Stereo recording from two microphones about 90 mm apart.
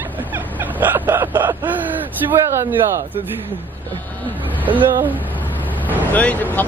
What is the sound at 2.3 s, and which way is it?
Speech, 30° right (ahead or behind).